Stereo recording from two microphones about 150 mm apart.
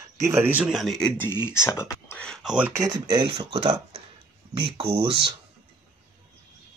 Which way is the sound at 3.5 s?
40° right (ahead or behind).